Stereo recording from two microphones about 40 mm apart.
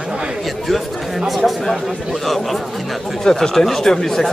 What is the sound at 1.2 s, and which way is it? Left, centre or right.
Speech, centre.